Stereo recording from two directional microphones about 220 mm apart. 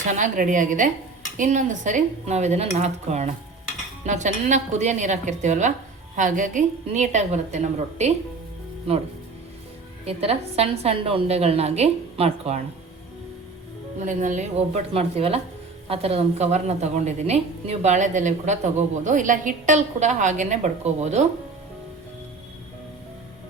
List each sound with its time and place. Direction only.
0.1 s a woman's voice: 35° right (ahead or behind)
14.0 s a woman's voice: 35° right (ahead or behind)